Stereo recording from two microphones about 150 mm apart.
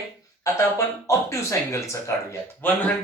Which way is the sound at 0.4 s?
20° left (ahead or behind).